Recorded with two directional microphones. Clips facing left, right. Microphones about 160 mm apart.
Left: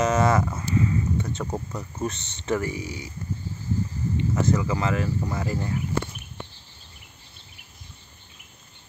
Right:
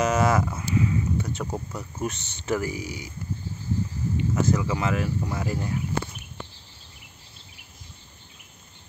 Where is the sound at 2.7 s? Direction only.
25° left (ahead or behind).